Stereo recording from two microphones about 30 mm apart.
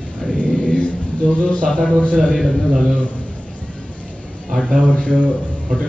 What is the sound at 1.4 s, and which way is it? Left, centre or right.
Speech, left.